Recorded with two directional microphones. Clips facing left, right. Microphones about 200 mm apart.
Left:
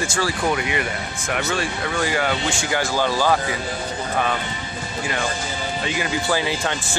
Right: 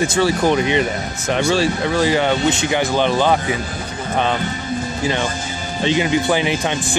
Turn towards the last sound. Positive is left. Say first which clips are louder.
# right 5 dB
turn(degrees=-20)  # may be behind; listen again after turning